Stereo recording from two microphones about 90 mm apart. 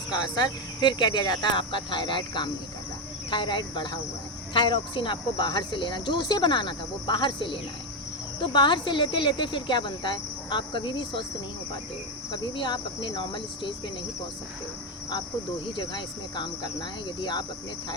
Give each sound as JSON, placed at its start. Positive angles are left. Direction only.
{"t": 0.1, "sound": "speech", "side_deg": 50}
{"t": 12.3, "sound": "speech", "side_deg": 60}
{"t": 15.7, "sound": "speech", "side_deg": 55}